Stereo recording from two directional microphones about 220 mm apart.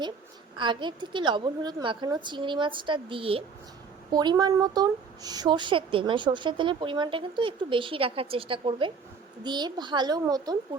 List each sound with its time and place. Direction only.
0.5 s a woman's voice: 20° right (ahead or behind)